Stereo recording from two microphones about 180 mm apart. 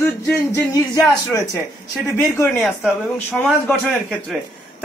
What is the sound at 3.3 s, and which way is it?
Speech, centre (ahead or behind).